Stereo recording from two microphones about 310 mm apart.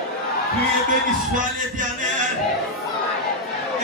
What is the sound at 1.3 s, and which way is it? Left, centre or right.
Speech, right.